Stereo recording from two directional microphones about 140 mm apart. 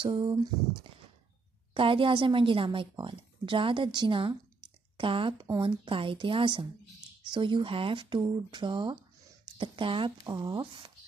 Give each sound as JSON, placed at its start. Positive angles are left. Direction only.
{"t": 0.0, "sound": "speech", "side_deg": -35}
{"t": 1.7, "sound": "speech", "side_deg": -40}